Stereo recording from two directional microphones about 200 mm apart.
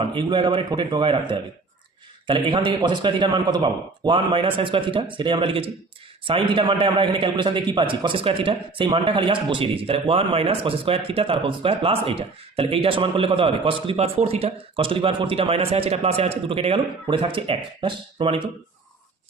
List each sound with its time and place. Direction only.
0.0 s a man's voice: 25° right (ahead or behind)